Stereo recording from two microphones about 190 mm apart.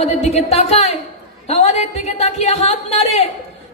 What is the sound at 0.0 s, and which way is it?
Speech, 35° left (ahead or behind).